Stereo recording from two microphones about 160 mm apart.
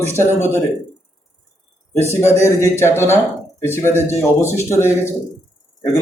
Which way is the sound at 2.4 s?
15° left (ahead or behind).